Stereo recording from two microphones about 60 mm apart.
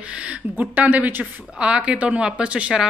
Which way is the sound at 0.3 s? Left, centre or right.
Right.